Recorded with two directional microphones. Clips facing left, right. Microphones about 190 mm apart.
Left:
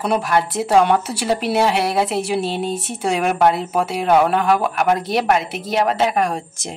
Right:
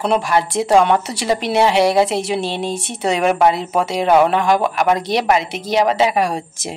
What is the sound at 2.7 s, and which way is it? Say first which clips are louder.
Speech: even; 80° right.